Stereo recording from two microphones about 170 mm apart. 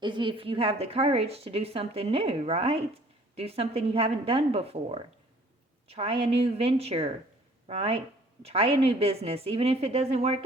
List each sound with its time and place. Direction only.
0.0 s a woman's voice: 30° right (ahead or behind)